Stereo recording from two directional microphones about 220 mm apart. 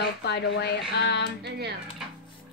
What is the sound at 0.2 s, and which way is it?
A child's voice, 50° left (ahead or behind).